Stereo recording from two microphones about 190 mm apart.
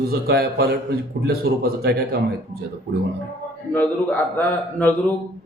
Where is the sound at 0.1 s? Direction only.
55° right (ahead or behind).